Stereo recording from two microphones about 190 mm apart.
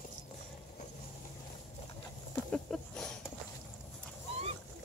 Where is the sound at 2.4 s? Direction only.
5° left (ahead or behind).